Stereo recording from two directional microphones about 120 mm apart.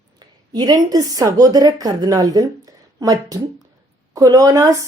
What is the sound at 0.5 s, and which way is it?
A woman's voice, 35° right (ahead or behind).